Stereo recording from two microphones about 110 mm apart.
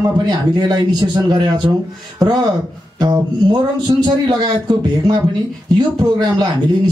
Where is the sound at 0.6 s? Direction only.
40° right (ahead or behind).